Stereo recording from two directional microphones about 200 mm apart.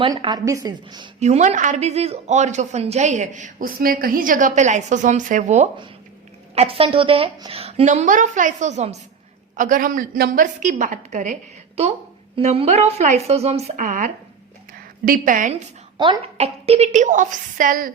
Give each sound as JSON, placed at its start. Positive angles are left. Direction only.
{"t": 0.0, "sound": "a woman's voice", "side_deg": -25}
{"t": 1.2, "sound": "a woman's voice", "side_deg": -35}
{"t": 12.4, "sound": "a woman's voice", "side_deg": -35}
{"t": 16.0, "sound": "a woman's voice", "side_deg": -25}